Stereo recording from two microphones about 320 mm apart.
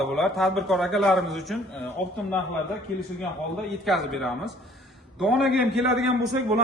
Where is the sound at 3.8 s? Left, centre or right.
Centre.